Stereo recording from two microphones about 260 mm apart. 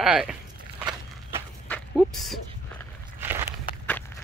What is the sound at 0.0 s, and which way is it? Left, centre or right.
Speech, centre.